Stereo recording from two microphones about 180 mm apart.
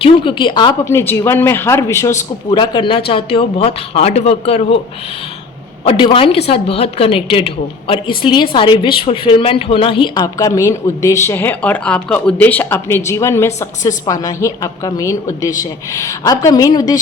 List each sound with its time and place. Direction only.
0.0 s a woman's voice: 25° left (ahead or behind)
2.5 s speech: 25° left (ahead or behind)
5.8 s a woman's voice: 30° left (ahead or behind)